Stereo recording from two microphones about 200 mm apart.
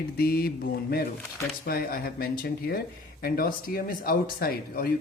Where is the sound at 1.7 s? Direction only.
50° left (ahead or behind).